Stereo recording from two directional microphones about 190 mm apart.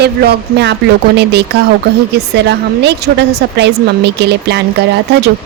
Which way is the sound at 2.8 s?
60° right (ahead or behind).